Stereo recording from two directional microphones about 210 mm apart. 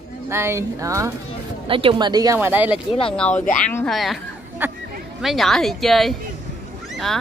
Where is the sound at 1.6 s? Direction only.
25° right (ahead or behind); by 2.8 s 10° right (ahead or behind).